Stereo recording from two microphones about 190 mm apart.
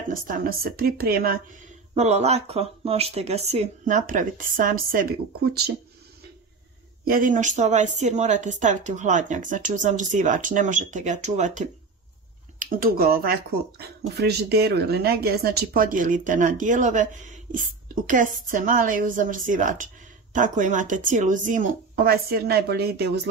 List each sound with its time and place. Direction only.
0.1 s speech: 50° right (ahead or behind)
2.0 s speech: 35° right (ahead or behind); by 5.6 s 50° right (ahead or behind)
7.1 s speech: 45° right (ahead or behind)
12.5 s speech: 50° right (ahead or behind)